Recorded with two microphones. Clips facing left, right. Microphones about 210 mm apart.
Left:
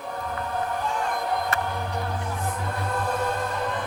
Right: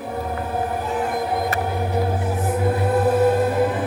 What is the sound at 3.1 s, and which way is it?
Music, 10° right (ahead or behind).